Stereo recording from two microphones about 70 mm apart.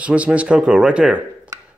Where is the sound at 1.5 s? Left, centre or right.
Right.